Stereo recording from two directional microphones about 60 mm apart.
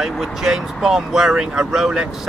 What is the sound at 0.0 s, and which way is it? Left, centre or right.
Speech, centre.